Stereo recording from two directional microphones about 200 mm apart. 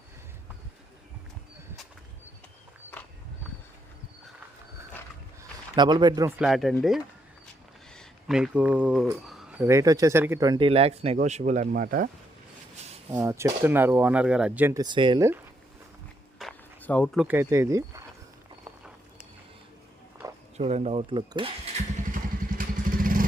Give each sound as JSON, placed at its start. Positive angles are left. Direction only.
{"t": 5.7, "sound": "speech", "side_deg": -20}
{"t": 6.4, "sound": "speech", "side_deg": 0}
{"t": 13.1, "sound": "speech", "side_deg": -15}
{"t": 14.8, "sound": "speech", "side_deg": -25}
{"t": 16.4, "sound": "a sound", "side_deg": 5}
{"t": 17.2, "sound": "speech", "side_deg": -10}
{"t": 20.2, "sound": "a sound", "side_deg": -15}
{"t": 20.6, "sound": "speech", "side_deg": -30}
{"t": 22.1, "sound": "vehicle", "side_deg": -45}